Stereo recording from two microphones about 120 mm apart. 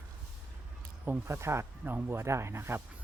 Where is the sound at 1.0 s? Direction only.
20° right (ahead or behind).